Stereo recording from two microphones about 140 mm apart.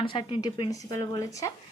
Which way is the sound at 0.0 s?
35° left (ahead or behind).